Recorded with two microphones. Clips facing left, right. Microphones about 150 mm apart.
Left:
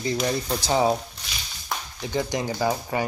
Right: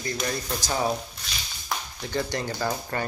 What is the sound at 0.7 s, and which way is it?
Speech, 20° left (ahead or behind).